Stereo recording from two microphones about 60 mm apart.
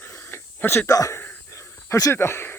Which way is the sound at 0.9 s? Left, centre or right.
Left.